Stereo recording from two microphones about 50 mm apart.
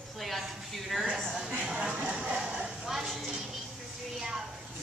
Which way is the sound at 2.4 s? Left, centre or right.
Centre.